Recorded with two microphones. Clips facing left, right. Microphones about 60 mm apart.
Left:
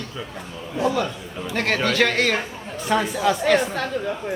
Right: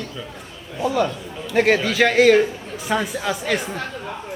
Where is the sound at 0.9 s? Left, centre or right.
Centre.